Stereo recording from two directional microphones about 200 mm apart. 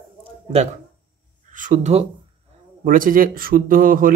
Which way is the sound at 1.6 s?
35° right (ahead or behind).